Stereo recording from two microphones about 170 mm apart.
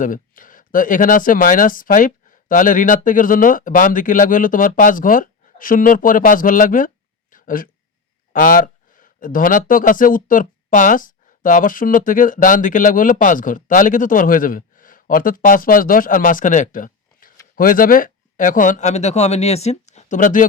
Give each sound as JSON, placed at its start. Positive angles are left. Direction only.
{"t": 0.0, "sound": "speech", "side_deg": 50}